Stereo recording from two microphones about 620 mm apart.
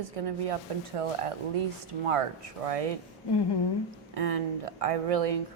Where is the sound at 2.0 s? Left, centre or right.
Right.